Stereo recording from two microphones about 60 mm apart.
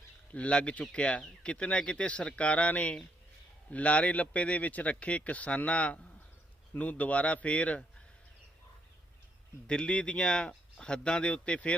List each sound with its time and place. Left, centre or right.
0.3 s speech: centre
9.6 s speech: centre